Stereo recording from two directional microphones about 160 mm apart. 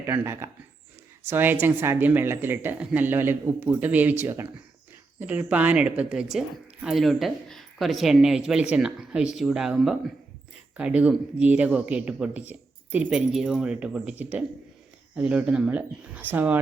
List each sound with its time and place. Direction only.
0.0 s speech: 15° right (ahead or behind)